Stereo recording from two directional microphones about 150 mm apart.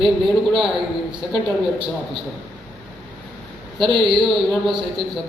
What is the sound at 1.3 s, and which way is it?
Speech, 35° right (ahead or behind).